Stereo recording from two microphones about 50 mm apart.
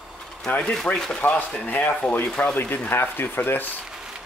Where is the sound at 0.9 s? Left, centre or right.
Left.